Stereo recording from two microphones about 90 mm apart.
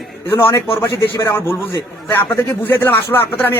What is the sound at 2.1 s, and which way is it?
Speech, 25° left (ahead or behind).